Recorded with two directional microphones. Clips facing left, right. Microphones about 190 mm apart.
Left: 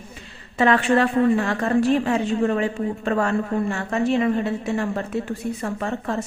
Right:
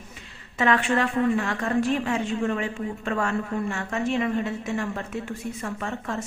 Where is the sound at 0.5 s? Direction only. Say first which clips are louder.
Left 5 dB; 35° left (ahead or behind).